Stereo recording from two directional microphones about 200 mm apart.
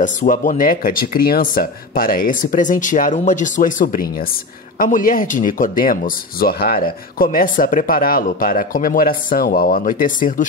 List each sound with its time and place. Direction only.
0.0 s speech: 40° left (ahead or behind)